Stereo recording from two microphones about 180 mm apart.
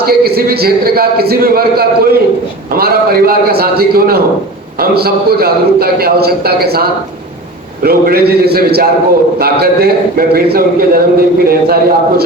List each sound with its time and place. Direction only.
0.0 s a man's voice: 60° right (ahead or behind)